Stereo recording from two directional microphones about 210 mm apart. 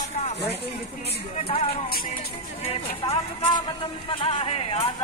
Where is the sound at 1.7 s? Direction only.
45° left (ahead or behind).